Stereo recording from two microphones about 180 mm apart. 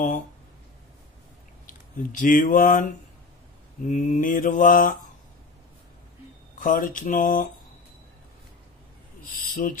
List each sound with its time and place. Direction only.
1.7 s speech: 45° left (ahead or behind)
3.9 s mantra: 45° left (ahead or behind)
6.6 s mantra: 50° left (ahead or behind)
9.2 s speech: 50° left (ahead or behind)